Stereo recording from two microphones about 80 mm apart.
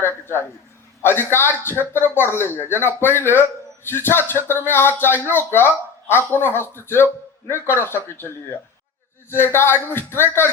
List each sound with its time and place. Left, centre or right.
0.0 s speech: left
9.3 s speech: left